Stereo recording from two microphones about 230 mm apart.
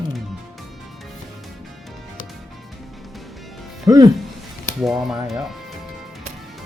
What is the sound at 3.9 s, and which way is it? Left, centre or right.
Speech, centre.